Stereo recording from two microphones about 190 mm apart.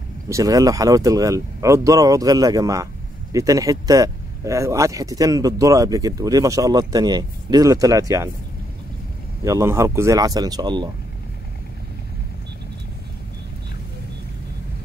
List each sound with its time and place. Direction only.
0.3 s speech: 20° right (ahead or behind)
9.4 s speech: 15° right (ahead or behind)